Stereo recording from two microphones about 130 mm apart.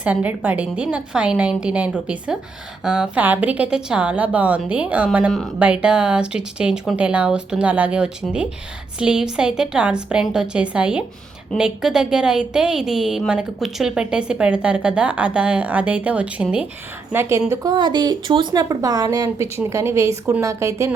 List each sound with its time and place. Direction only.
0.0 s a woman's voice: 10° right (ahead or behind)
17.1 s speech: 20° right (ahead or behind)
17.5 s speech: 30° right (ahead or behind)